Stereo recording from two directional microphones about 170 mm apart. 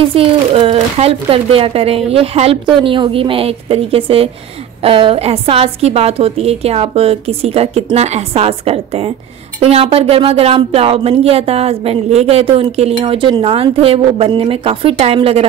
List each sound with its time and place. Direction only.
0.1 s speech: 35° right (ahead or behind)